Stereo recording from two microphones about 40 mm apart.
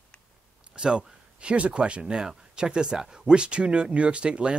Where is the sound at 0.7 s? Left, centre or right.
Right.